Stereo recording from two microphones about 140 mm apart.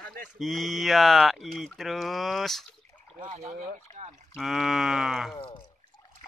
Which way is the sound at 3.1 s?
55° right (ahead or behind).